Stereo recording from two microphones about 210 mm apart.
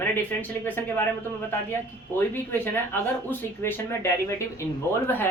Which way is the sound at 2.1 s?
10° left (ahead or behind).